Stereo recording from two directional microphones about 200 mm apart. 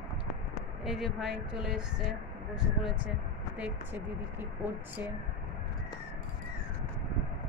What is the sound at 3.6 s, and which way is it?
Speech, 10° right (ahead or behind).